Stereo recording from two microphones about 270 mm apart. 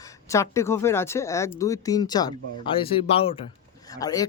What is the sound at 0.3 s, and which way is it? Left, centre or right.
Speech, centre.